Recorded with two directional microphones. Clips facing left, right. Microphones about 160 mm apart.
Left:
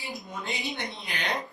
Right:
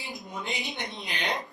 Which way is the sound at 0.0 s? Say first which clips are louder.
Even; 20° right (ahead or behind).